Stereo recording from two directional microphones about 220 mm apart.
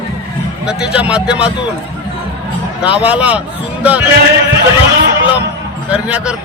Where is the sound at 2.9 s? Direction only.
5° right (ahead or behind).